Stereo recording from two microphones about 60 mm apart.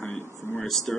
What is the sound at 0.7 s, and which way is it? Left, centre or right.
Speech, centre.